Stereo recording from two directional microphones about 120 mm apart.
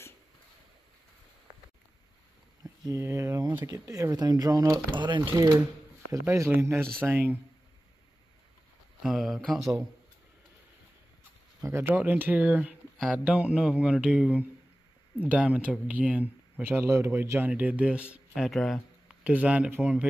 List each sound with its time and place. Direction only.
2.6 s speech: 30° right (ahead or behind)
9.0 s speech: centre (ahead or behind)
11.6 s speech: 20° right (ahead or behind)
18.3 s speech: centre (ahead or behind)
19.2 s speech: 10° right (ahead or behind)